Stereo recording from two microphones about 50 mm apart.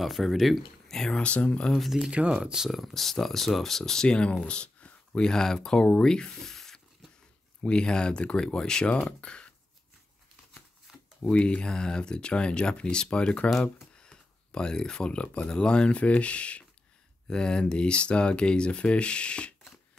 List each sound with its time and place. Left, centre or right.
0.0 s speech: centre
1.2 s speech: left
1.8 s speech: centre
2.0 s speech: centre
2.7 s speech: centre
4.5 s a sound: left
5.2 s speech: centre
11.2 s speech: left
13.5 s speech: centre
13.9 s speech: centre